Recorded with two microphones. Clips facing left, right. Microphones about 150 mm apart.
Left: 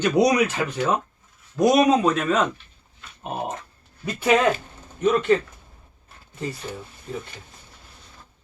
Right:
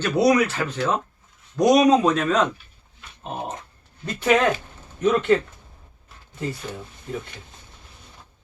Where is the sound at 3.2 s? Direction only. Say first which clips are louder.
Left 2 dB; 15° left (ahead or behind).